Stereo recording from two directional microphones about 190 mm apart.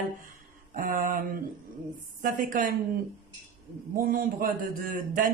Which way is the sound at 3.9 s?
45° right (ahead or behind).